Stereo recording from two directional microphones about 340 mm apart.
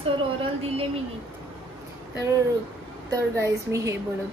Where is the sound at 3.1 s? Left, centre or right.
Centre.